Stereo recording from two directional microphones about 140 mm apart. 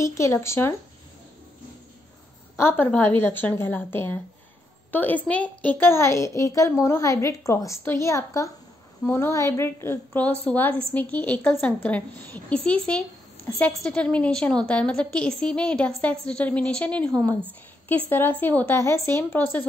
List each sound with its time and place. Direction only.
0.0 s a woman's voice: 20° left (ahead or behind)
2.5 s a woman's voice: 15° left (ahead or behind)